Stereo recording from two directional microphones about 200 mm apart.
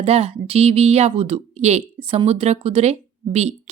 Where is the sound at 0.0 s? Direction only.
30° right (ahead or behind).